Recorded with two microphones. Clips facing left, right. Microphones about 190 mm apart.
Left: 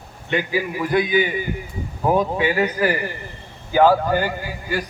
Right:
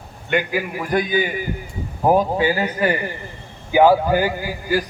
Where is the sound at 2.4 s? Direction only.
30° right (ahead or behind).